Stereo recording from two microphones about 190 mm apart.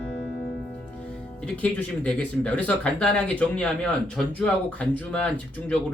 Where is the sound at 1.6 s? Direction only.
5° left (ahead or behind).